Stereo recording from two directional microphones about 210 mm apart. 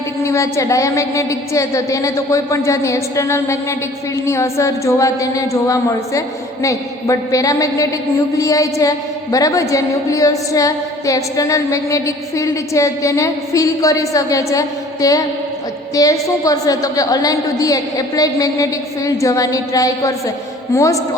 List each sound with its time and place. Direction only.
0.2 s a woman's voice: 15° left (ahead or behind)